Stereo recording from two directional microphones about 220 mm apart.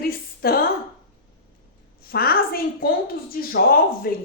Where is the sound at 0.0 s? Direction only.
40° left (ahead or behind).